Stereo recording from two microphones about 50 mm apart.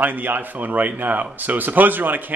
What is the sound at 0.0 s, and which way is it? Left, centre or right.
Speech, right.